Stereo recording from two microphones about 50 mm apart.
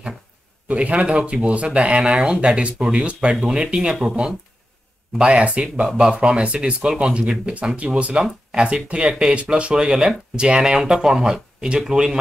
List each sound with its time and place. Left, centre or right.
0.7 s speech: right
7.5 s speech: right; by 12.2 s centre